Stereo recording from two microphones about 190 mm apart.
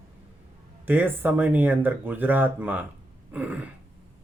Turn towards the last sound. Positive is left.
turn(degrees=-10)  # may be behind; listen again after turning